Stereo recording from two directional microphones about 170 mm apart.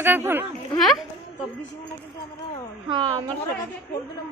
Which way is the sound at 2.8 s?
30° right (ahead or behind).